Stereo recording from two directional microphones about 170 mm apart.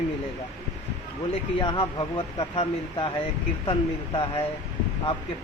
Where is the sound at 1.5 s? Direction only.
30° left (ahead or behind).